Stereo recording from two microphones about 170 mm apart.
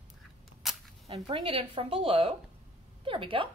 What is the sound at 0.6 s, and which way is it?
Single-lens reflex camera, centre (ahead or behind).